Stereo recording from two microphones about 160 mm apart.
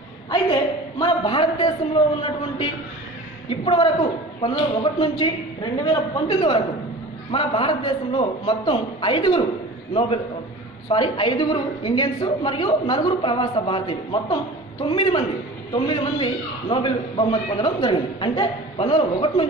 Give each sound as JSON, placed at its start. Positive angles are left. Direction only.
{"t": 0.3, "sound": "a sound", "side_deg": 25}
{"t": 3.4, "sound": "a man's voice", "side_deg": 35}
{"t": 10.9, "sound": "a woman's voice", "side_deg": 30}